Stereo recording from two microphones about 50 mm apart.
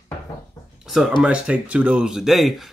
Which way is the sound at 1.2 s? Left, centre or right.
Right.